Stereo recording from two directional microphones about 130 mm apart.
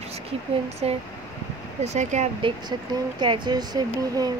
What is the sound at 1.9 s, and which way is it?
Speech, 65° right (ahead or behind).